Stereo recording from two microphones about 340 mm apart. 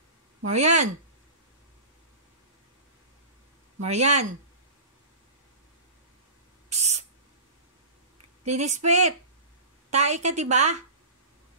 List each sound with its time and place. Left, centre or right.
0.5 s a woman's voice: centre
3.8 s a woman's voice: centre
6.7 s owl: centre
8.5 s a woman's voice: centre